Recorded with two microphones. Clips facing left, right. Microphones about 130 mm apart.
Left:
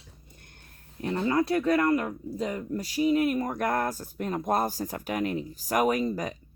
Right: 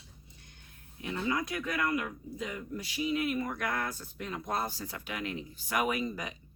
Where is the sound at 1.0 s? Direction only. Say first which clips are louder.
Left 7 dB; 40° left (ahead or behind).